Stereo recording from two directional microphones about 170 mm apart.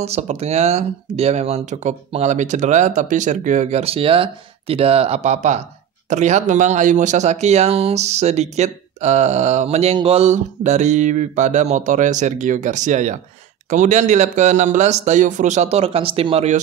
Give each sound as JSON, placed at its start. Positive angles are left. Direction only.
{"t": 0.0, "sound": "speech", "side_deg": -40}